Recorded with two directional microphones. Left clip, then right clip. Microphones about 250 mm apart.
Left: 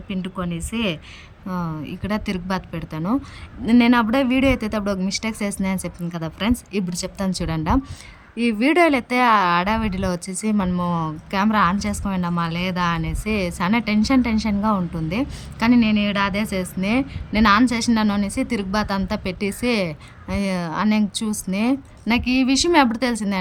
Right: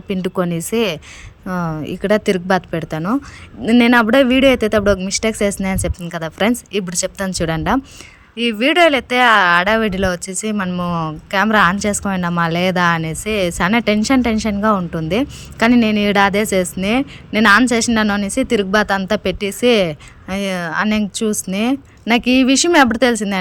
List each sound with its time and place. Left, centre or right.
0.1 s speech: centre
11.3 s speech: centre